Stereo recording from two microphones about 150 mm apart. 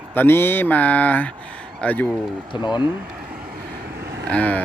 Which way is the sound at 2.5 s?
30° left (ahead or behind).